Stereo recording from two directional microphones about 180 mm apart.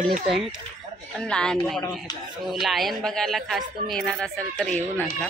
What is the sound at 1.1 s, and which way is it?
A woman's voice, 5° left (ahead or behind).